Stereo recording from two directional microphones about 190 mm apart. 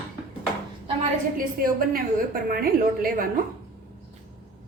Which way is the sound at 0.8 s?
40° right (ahead or behind).